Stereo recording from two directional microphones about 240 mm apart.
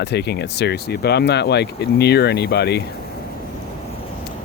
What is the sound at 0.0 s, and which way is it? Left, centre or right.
Speech, left.